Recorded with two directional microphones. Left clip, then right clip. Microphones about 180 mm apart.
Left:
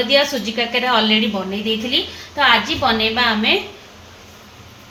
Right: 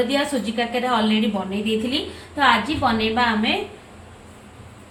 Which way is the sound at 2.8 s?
40° left (ahead or behind).